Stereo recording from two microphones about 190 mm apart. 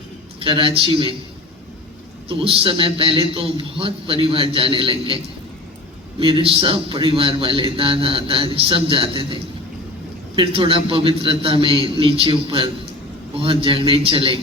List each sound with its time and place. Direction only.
0.3 s a man's voice: 30° right (ahead or behind)
2.4 s a man's voice: 30° right (ahead or behind)